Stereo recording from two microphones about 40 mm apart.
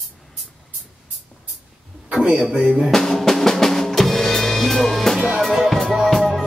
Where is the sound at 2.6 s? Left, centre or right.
Centre.